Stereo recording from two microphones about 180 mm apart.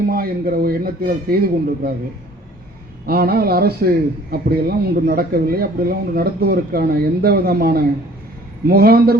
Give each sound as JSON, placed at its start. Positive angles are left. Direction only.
{"t": 0.1, "sound": "speech", "side_deg": -55}
{"t": 3.1, "sound": "speech", "side_deg": -60}